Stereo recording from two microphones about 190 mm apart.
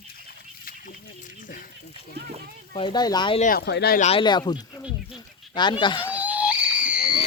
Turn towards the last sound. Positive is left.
turn(degrees=-5)  # may be behind; listen again after turning